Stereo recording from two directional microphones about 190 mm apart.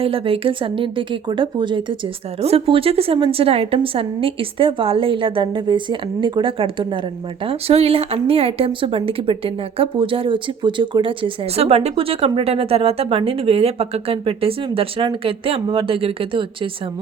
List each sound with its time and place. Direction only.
0.0 s speech: 30° right (ahead or behind)